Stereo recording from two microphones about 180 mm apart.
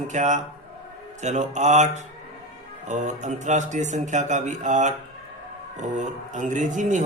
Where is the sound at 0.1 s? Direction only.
40° right (ahead or behind).